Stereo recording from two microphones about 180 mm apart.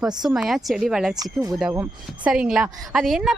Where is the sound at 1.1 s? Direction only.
20° right (ahead or behind).